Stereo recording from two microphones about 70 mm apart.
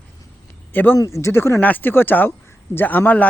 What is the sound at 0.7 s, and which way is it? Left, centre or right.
Speech, left.